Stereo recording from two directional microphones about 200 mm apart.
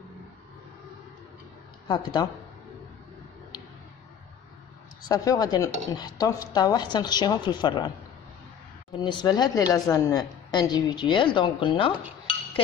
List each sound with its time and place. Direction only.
1.9 s a woman's voice: 20° left (ahead or behind)
5.0 s a woman's voice: 20° left (ahead or behind)
9.0 s a woman's voice: 20° left (ahead or behind)